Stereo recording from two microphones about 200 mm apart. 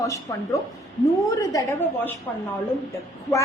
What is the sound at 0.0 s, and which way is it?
A woman's voice, 15° left (ahead or behind).